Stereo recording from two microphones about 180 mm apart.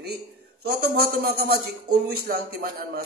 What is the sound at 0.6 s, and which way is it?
A man's voice, 60° right (ahead or behind).